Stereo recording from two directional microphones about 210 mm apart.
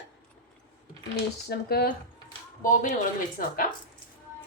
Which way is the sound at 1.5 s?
50° left (ahead or behind).